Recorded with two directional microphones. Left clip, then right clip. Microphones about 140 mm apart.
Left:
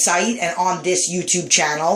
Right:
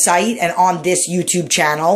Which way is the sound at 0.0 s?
40° right (ahead or behind).